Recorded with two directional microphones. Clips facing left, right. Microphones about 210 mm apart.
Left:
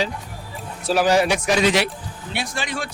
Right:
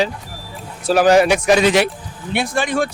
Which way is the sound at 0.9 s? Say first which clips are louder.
Right 5 dB; 50° right (ahead or behind).